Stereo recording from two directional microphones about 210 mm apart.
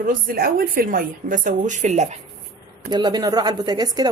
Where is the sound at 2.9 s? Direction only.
20° right (ahead or behind).